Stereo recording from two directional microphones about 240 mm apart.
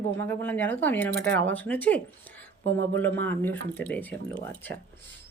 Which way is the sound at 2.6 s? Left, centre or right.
Right.